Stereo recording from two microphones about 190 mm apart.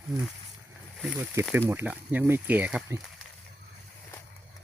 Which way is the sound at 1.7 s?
10° right (ahead or behind).